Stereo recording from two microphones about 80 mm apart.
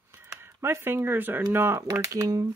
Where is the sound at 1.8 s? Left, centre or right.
Right.